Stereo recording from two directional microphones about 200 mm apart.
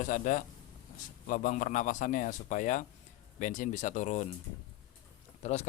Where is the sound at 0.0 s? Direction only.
40° left (ahead or behind).